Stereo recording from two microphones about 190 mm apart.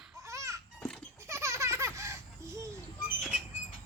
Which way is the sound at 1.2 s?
15° right (ahead or behind).